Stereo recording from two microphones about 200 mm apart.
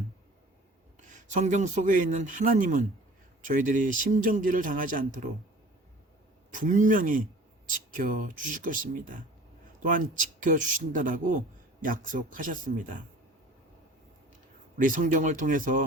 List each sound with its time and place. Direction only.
1.0 s speech: 35° right (ahead or behind)
6.5 s a man's voice: 40° right (ahead or behind)
14.8 s speech: 45° right (ahead or behind)